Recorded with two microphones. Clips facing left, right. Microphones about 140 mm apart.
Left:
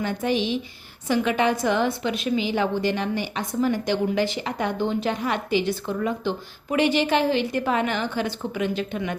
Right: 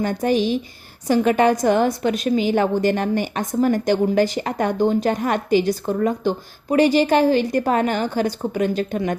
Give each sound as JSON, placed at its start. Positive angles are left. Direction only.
{"t": 0.0, "sound": "a woman's voice", "side_deg": -40}